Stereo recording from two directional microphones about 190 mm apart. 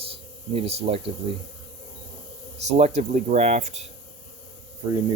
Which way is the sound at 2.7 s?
35° right (ahead or behind).